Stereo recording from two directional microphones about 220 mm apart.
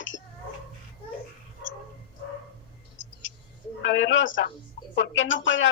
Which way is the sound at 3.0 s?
60° left (ahead or behind).